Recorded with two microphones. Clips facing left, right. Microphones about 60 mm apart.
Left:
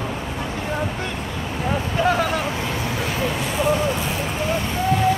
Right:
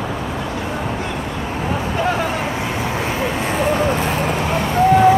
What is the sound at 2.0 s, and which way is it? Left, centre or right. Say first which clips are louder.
Vehicle: left 1 dB; right.